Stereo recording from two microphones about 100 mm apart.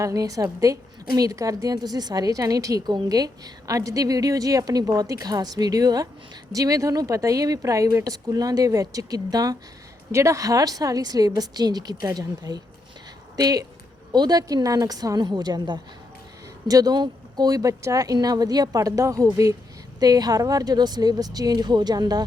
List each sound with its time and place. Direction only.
0.0 s a woman's voice: 35° right (ahead or behind)